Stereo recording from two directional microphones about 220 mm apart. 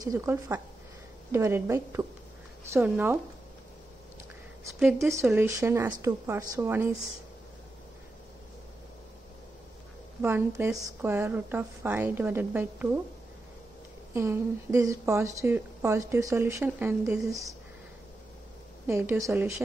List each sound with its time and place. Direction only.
0.0 s a woman's voice: 15° right (ahead or behind)
4.6 s a woman's voice: 10° right (ahead or behind)
10.2 s a woman's voice: 10° right (ahead or behind)
14.1 s a woman's voice: 10° right (ahead or behind)
18.9 s a woman's voice: 10° right (ahead or behind)